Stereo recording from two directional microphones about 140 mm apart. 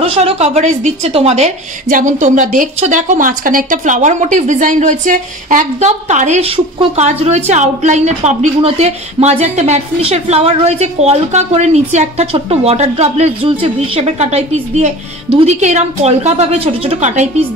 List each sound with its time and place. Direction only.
0.0 s a woman's voice: 45° right (ahead or behind)